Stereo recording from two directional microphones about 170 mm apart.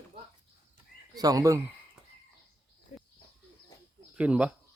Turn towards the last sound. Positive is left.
turn(degrees=-5)  # may be behind; listen again after turning